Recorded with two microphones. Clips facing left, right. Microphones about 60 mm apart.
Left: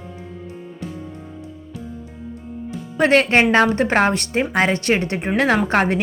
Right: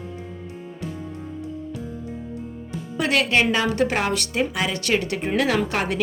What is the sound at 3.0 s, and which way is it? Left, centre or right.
A woman's voice, left.